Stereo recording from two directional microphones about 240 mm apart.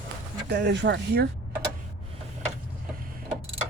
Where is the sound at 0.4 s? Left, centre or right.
Right.